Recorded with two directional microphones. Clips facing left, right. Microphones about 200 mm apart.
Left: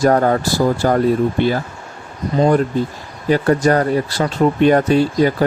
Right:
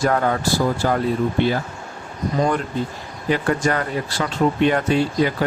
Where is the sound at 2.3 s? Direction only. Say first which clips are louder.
Left 7 dB; 35° left (ahead or behind).